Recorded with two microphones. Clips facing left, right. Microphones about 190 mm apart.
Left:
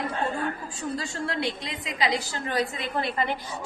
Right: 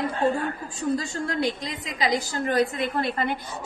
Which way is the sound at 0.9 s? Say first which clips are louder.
Right 4 dB; 45° right (ahead or behind).